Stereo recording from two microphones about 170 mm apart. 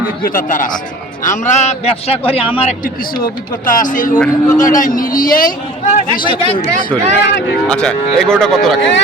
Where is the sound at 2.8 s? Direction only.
55° left (ahead or behind).